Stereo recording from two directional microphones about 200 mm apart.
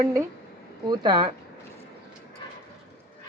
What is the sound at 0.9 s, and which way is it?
Speech, 25° right (ahead or behind).